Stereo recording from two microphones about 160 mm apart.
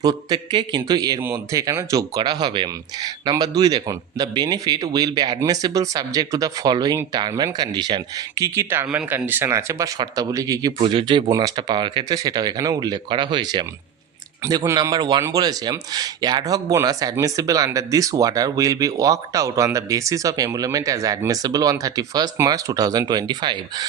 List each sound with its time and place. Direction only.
0.0 s speech: 25° right (ahead or behind)
10.8 s speech: 35° right (ahead or behind)